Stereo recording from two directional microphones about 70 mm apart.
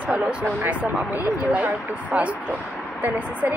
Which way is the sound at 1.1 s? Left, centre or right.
Right.